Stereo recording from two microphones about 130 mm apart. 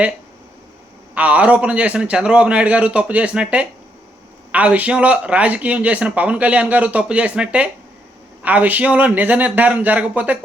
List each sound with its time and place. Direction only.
1.1 s speech: 10° right (ahead or behind)